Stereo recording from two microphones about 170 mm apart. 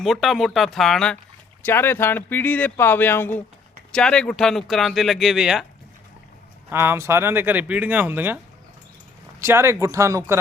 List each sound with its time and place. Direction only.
0.0 s speech: centre (ahead or behind)
6.7 s speech: 15° right (ahead or behind)
9.4 s speech: 15° right (ahead or behind)